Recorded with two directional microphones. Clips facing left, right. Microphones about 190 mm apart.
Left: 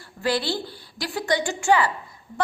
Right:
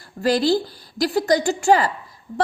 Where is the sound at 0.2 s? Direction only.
40° right (ahead or behind).